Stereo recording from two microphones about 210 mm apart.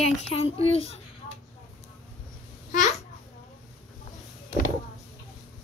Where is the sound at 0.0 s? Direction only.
30° left (ahead or behind).